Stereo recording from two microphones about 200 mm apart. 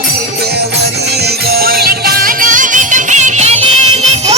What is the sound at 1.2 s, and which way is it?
Music, 50° right (ahead or behind).